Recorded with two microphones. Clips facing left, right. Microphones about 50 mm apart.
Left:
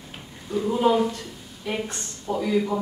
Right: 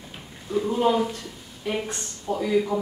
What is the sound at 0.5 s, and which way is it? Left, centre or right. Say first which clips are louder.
Speech: left 1 dB; centre.